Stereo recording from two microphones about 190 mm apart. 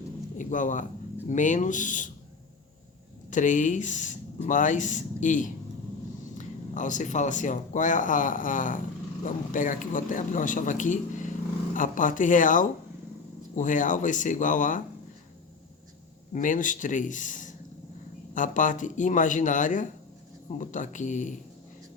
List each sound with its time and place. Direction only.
0.3 s speech: 40° left (ahead or behind)
3.2 s a man's voice: 40° left (ahead or behind)
16.3 s a man's voice: 45° left (ahead or behind)